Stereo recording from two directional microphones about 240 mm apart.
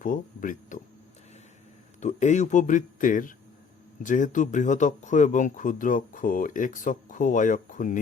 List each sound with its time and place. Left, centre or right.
0.0 s speech: left
2.0 s speech: left